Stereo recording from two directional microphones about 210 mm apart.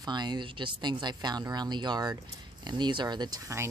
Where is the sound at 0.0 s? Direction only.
20° right (ahead or behind).